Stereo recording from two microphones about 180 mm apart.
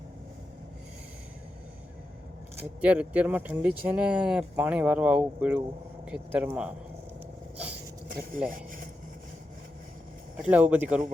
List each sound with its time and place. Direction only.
2.6 s speech: 5° right (ahead or behind)
8.0 s a sound: 50° right (ahead or behind)
8.4 s speech: 50° right (ahead or behind)
10.3 s speech: 5° right (ahead or behind)